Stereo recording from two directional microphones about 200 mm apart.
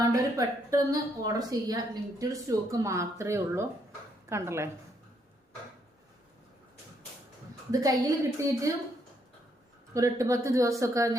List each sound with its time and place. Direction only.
0.0 s a woman's voice: 15° right (ahead or behind)
7.7 s a woman's voice: 15° right (ahead or behind)
9.9 s a woman's voice: 15° right (ahead or behind)